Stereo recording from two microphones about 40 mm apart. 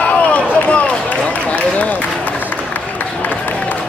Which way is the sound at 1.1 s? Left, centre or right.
Left.